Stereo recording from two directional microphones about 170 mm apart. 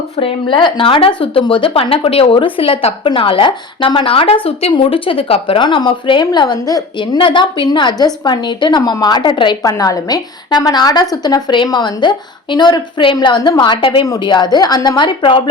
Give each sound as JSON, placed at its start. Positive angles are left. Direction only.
{"t": 0.2, "sound": "a woman's voice", "side_deg": 30}